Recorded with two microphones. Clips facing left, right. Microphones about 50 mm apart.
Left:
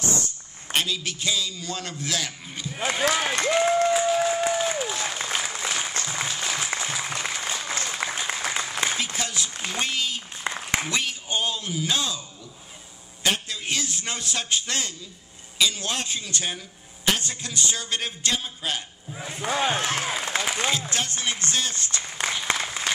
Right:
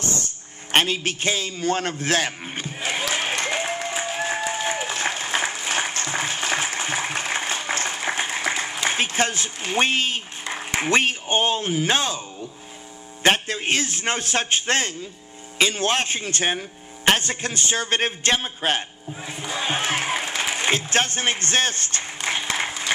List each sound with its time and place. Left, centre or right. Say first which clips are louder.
0.7 s a man's voice: right 6 dB; right
3.2 s applause: left 2 dB; right
9.7 s a man's voice: right 8 dB; right
19.4 s speech: left 4 dB; left
19.7 s a man's voice: right 2 dB; right
22.6 s applause: right 3 dB; right